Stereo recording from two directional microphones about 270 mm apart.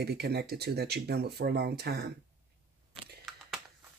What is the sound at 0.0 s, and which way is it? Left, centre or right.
Speech, right.